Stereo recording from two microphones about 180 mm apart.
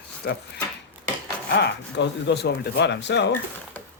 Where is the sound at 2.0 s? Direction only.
70° left (ahead or behind).